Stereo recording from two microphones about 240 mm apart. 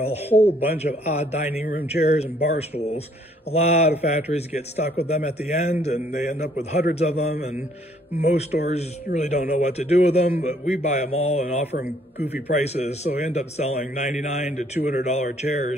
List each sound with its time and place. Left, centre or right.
0.3 s speech: centre
0.8 s a man's voice: left
3.5 s a man's voice: left